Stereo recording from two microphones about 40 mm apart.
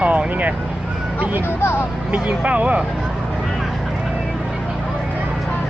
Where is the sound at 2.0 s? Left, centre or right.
Right.